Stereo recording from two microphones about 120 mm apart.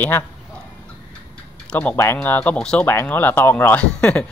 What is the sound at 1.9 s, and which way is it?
Speech, 20° left (ahead or behind).